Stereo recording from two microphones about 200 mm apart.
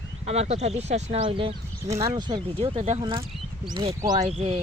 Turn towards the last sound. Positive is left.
turn(degrees=-30)  # may be behind; listen again after turning